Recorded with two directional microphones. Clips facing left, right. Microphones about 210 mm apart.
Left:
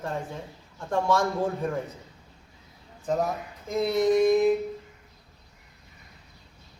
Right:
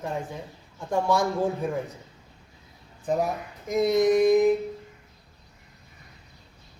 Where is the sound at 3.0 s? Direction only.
15° right (ahead or behind).